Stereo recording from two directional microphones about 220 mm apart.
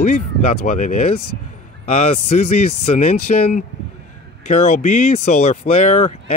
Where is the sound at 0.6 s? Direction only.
30° left (ahead or behind).